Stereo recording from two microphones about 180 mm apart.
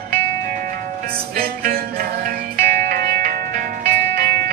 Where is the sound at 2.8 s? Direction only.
55° right (ahead or behind).